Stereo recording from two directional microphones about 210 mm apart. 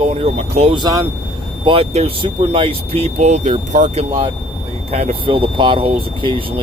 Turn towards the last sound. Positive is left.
turn(degrees=-25)  # may be behind; listen again after turning